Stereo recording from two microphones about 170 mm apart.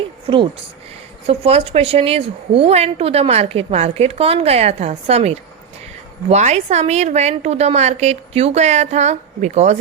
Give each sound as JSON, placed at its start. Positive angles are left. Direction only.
{"t": 0.3, "sound": "a woman's voice", "side_deg": -30}